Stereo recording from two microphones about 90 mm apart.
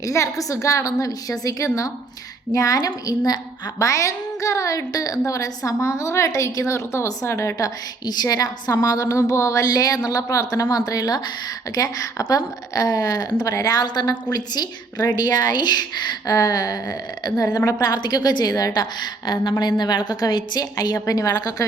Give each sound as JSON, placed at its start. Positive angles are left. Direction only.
{"t": 0.0, "sound": "a woman's voice", "side_deg": 40}
{"t": 8.0, "sound": "a woman's voice", "side_deg": 50}